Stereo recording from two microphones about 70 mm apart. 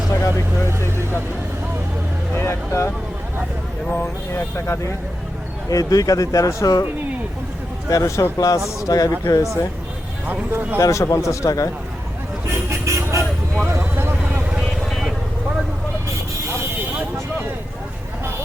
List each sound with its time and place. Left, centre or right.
0.1 s speech: left
2.3 s speech: left
3.9 s speech: left
5.6 s speech: left
7.9 s speech: left
9.2 s speech: left
10.2 s speech: right
10.8 s speech: left
12.8 s vehicle: right
13.7 s vehicle: right
14.8 s vehicle: centre